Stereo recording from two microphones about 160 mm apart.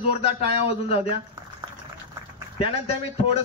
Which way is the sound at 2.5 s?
40° left (ahead or behind).